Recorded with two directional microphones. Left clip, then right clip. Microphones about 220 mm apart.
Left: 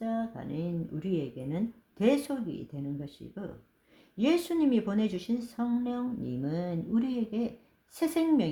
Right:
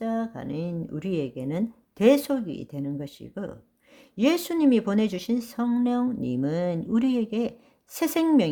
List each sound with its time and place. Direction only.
0.0 s a woman's voice: 40° right (ahead or behind)